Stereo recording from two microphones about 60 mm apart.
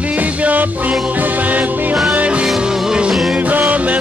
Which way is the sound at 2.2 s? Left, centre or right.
Centre.